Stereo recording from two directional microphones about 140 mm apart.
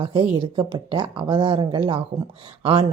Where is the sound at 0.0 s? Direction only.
40° right (ahead or behind).